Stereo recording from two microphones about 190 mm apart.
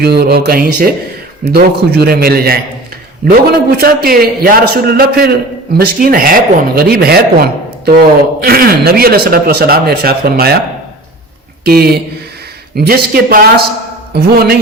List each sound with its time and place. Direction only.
0.0 s a man's voice: 55° right (ahead or behind)
3.8 s a man's voice: 50° right (ahead or behind)
11.6 s a man's voice: 55° right (ahead or behind)